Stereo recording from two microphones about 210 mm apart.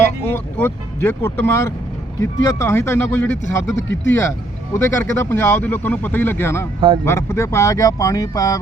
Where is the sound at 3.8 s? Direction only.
60° left (ahead or behind).